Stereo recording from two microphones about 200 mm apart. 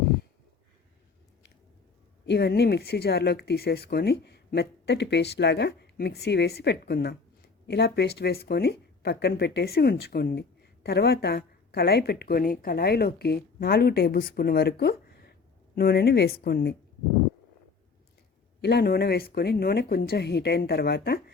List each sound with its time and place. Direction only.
2.2 s speech: 55° left (ahead or behind)
18.6 s speech: 55° left (ahead or behind)